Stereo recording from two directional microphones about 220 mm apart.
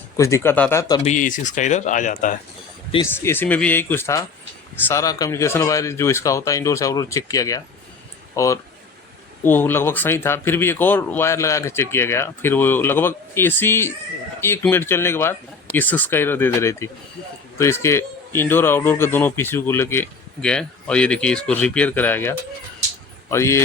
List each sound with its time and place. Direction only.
0.2 s speech: 15° left (ahead or behind)
1.0 s speech: 35° left (ahead or behind)
3.2 s speech: 10° left (ahead or behind)